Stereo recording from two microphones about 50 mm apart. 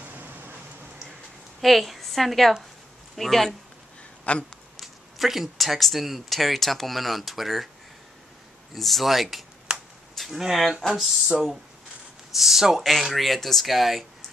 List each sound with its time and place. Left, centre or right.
0.0 s rain: right
1.6 s a woman's voice: centre
4.3 s speech: left
4.7 s speech: centre
8.7 s speech: centre
9.7 s a sound: centre
10.1 s a sound: centre
10.4 s speech: centre